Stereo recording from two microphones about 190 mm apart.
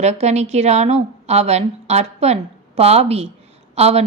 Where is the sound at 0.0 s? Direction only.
35° right (ahead or behind).